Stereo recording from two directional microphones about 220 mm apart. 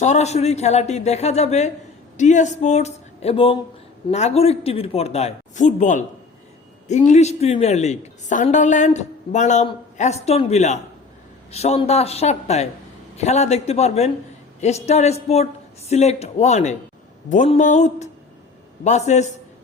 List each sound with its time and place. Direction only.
0.0 s a woman's voice: 30° left (ahead or behind)